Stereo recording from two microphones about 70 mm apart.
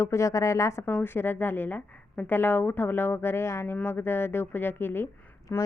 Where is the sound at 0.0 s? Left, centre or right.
Left.